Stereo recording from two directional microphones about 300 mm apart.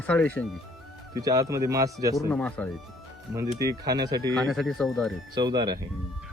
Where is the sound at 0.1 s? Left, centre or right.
Centre.